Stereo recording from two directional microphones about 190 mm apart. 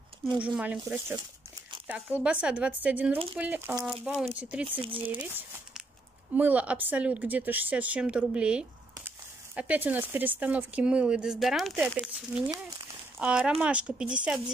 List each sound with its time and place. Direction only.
0.4 s speech: 5° right (ahead or behind)
4.6 s speech: 25° right (ahead or behind)
5.0 s speech: 10° right (ahead or behind)
12.4 s speech: 20° right (ahead or behind)
13.2 s speech: 5° right (ahead or behind)